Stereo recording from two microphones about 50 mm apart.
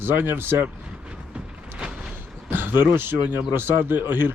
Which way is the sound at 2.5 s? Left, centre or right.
Right.